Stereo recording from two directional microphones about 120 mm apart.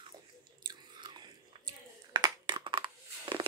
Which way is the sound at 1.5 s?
55° right (ahead or behind).